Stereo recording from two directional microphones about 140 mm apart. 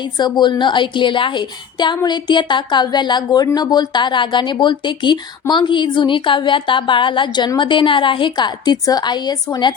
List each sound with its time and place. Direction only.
0.0 s speech: 30° left (ahead or behind)